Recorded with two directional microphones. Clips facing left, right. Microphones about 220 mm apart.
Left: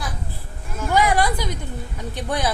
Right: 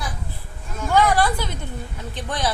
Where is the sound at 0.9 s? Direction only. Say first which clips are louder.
Right 1 dB; 15° left (ahead or behind).